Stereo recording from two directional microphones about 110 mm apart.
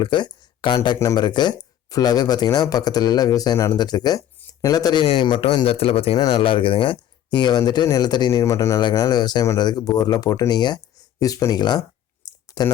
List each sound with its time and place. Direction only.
0.0 s speech: 45° left (ahead or behind)
0.9 s speech: 35° left (ahead or behind)
5.6 s speech: 65° left (ahead or behind)
6.1 s speech: 45° left (ahead or behind); by 8.8 s 30° left (ahead or behind)
8.8 s speech: 40° left (ahead or behind)
12.2 s clicking: 35° left (ahead or behind)